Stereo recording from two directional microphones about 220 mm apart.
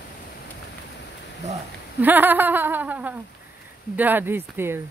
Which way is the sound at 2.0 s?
10° right (ahead or behind).